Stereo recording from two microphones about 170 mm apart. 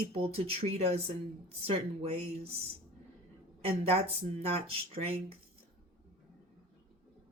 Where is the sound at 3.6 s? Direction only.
35° right (ahead or behind).